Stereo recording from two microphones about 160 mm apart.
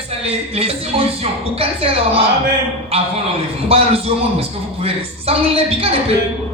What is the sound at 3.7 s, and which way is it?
Speech, 35° right (ahead or behind).